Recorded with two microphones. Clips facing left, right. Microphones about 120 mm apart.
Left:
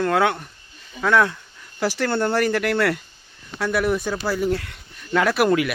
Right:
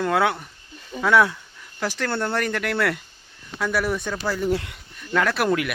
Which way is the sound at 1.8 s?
5° left (ahead or behind).